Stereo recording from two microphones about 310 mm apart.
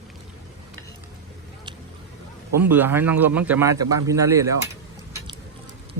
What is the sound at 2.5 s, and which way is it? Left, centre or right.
A man's voice, centre.